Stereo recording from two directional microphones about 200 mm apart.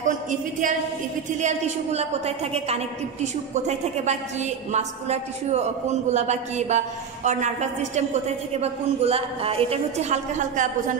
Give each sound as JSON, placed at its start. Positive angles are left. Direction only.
{"t": 0.3, "sound": "a woman's voice", "side_deg": -40}